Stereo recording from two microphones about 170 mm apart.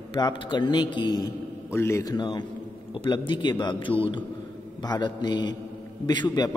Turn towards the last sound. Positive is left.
turn(degrees=25)  # may be behind; listen again after turning